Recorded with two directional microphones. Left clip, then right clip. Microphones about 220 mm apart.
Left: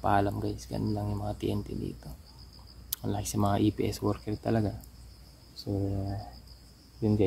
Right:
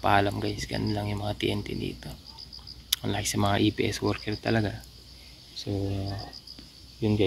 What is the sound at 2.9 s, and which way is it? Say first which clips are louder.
Speech: right 6 dB; 10° left (ahead or behind).